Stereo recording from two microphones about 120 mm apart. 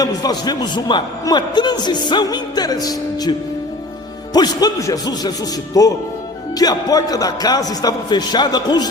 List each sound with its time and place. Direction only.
0.0 s a man's voice: 35° left (ahead or behind)
4.4 s a man's voice: 35° left (ahead or behind)